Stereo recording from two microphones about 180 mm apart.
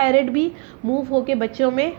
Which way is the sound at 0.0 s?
40° right (ahead or behind).